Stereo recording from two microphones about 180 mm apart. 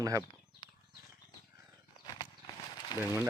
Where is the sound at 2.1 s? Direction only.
25° left (ahead or behind).